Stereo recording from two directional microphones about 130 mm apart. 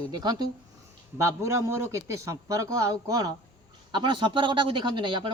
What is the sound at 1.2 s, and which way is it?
A man's voice, 25° right (ahead or behind).